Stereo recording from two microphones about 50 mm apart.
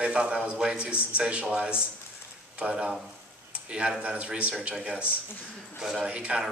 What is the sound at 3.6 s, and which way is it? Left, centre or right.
Speech, right.